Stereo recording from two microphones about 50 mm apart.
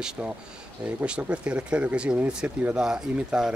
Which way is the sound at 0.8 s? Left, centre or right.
Right.